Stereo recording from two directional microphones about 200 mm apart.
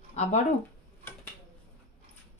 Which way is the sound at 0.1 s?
35° left (ahead or behind).